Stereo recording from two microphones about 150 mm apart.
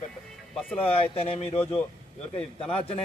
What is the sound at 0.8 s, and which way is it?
Speech, 40° left (ahead or behind).